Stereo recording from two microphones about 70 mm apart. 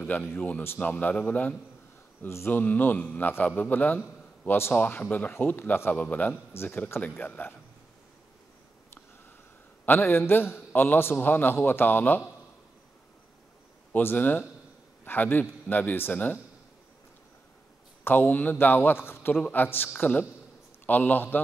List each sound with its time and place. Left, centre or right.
0.0 s a man's voice: left
2.2 s a man's voice: left
4.7 s a man's voice: left
6.3 s a man's voice: left
9.8 s a man's voice: left
13.9 s a man's voice: left
18.0 s a man's voice: left